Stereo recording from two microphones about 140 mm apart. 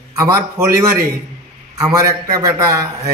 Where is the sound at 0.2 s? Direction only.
20° right (ahead or behind).